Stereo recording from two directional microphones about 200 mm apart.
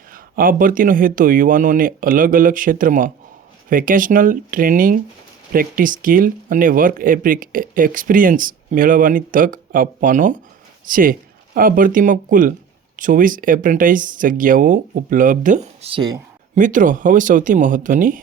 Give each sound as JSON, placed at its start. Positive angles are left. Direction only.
{"t": 0.1, "sound": "speech", "side_deg": -45}
{"t": 16.6, "sound": "speech", "side_deg": -40}